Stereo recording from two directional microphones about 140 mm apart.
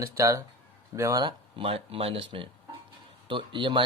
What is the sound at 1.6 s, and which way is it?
Speech, 40° right (ahead or behind).